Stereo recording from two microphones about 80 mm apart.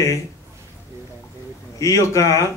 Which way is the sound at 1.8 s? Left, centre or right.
Left.